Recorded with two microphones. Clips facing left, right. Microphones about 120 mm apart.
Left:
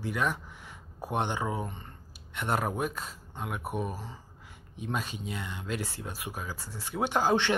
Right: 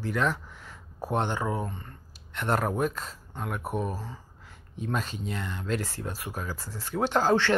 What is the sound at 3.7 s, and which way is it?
Speech, 40° right (ahead or behind).